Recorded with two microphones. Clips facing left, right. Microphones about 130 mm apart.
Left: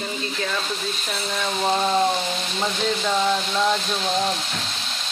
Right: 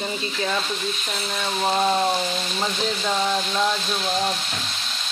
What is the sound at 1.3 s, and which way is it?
A woman's voice, 5° right (ahead or behind).